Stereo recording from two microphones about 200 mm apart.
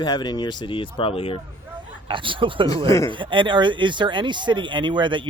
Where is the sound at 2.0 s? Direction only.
25° right (ahead or behind).